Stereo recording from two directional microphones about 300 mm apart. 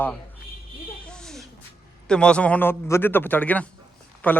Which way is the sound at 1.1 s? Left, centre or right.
Centre.